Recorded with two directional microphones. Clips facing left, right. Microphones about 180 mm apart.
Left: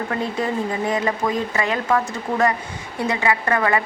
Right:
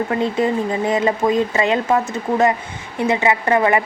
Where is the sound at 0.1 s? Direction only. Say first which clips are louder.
Right 4 dB; 20° right (ahead or behind).